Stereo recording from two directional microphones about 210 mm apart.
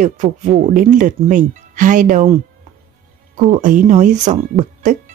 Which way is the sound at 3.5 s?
40° right (ahead or behind).